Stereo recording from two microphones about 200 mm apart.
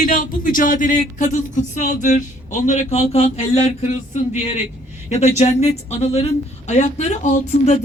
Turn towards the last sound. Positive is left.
turn(degrees=35)  # may be behind; listen again after turning